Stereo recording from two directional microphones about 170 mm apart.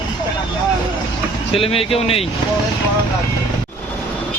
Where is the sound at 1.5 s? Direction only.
35° left (ahead or behind).